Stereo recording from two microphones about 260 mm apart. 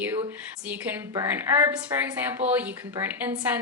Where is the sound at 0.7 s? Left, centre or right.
Centre.